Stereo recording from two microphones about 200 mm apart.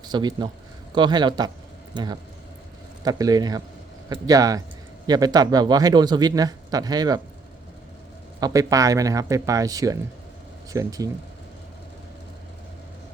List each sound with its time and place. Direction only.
0.0 s speech: 20° right (ahead or behind)
8.4 s speech: 15° right (ahead or behind)